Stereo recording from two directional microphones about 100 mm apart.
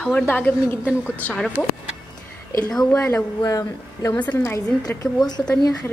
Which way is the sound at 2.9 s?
25° left (ahead or behind).